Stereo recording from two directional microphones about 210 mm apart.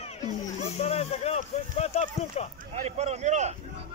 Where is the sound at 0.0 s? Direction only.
30° left (ahead or behind).